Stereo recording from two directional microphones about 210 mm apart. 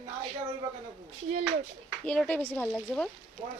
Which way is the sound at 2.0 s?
5° left (ahead or behind).